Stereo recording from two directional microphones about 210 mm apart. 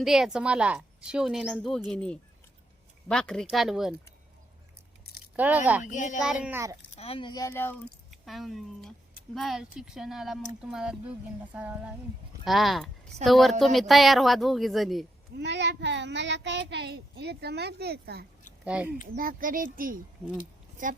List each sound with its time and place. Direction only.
0.0 s a woman's voice: centre (ahead or behind)
5.4 s speech: 5° right (ahead or behind)
5.8 s speech: 35° left (ahead or behind)
6.4 s speech: 10° right (ahead or behind)
6.9 s speech: 30° left (ahead or behind); by 7.8 s 10° left (ahead or behind)
8.1 s a woman's voice: centre (ahead or behind)
15.4 s a child's voice: 55° right (ahead or behind)
18.6 s speech: 5° right (ahead or behind)
19.1 s a child's voice: 40° right (ahead or behind)